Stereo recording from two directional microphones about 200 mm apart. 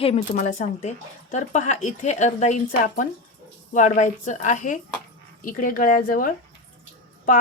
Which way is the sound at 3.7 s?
40° left (ahead or behind).